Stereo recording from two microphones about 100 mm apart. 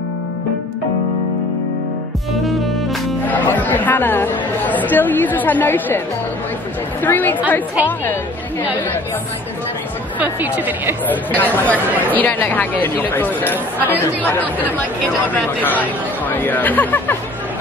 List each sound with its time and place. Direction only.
3.3 s speech: 15° left (ahead or behind)
7.0 s a woman's voice: 20° left (ahead or behind)
10.1 s a woman's voice: 15° right (ahead or behind)
11.1 s speech: 15° left (ahead or behind)